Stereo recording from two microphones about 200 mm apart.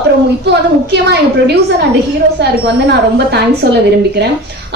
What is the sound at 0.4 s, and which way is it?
A woman's voice, 55° right (ahead or behind).